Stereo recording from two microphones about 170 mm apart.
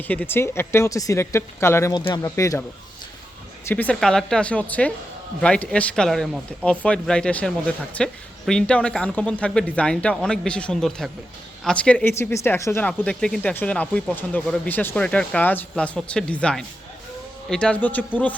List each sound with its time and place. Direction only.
0.1 s speech: 10° left (ahead or behind)
3.7 s speech: 10° left (ahead or behind)
12.9 s speech: 5° left (ahead or behind)